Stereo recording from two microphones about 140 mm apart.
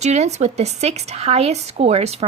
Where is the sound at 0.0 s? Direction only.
55° right (ahead or behind).